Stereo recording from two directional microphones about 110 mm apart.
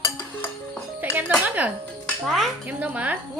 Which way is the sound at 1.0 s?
15° right (ahead or behind).